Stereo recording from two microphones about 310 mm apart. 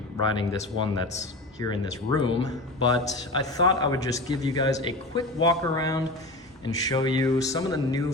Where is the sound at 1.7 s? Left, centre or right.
Centre.